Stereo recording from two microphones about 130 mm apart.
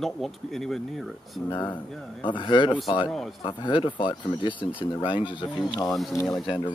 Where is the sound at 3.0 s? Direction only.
Centre (ahead or behind).